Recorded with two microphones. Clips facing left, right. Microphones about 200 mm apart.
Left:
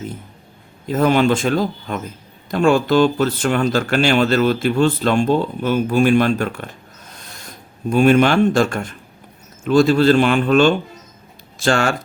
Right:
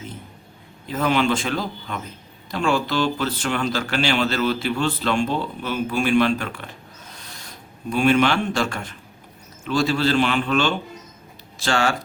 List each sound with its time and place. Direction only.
0.9 s speech: 45° left (ahead or behind)
7.9 s speech: 45° left (ahead or behind)